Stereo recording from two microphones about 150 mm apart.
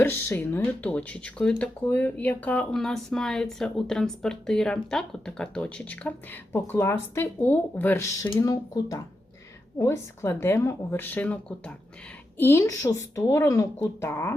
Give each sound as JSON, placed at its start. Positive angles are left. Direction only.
{"t": 0.0, "sound": "speech", "side_deg": 15}